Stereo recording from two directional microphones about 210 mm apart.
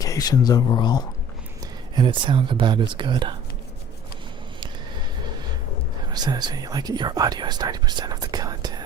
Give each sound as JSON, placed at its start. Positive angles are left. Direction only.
{"t": 0.0, "sound": "speech", "side_deg": 15}
{"t": 2.0, "sound": "speech", "side_deg": -25}
{"t": 6.1, "sound": "speech", "side_deg": -20}